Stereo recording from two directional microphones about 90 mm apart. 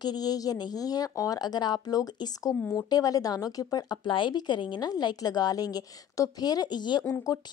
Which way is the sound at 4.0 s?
60° left (ahead or behind).